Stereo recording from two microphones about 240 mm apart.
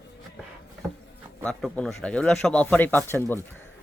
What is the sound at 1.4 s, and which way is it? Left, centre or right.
Speech, centre.